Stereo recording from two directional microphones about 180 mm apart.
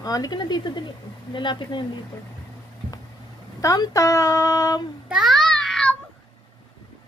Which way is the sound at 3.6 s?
20° left (ahead or behind).